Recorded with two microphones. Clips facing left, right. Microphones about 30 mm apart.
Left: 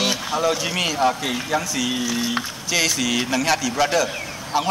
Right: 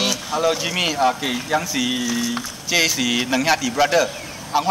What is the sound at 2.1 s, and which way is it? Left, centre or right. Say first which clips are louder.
Speech: even; centre.